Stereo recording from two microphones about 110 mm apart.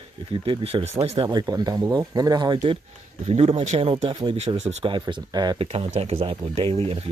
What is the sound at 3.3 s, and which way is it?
Speech, 65° right (ahead or behind).